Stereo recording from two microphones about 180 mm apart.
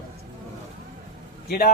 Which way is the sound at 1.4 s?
55° left (ahead or behind).